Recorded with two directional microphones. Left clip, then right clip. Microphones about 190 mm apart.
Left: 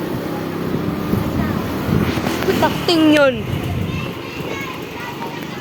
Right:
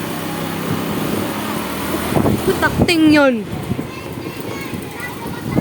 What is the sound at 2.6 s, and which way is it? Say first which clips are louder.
Speech: even; 40° right (ahead or behind).